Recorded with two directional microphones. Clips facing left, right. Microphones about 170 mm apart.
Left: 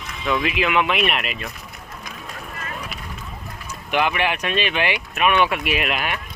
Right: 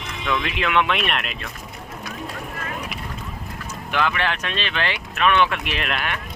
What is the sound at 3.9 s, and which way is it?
Speech, 15° left (ahead or behind).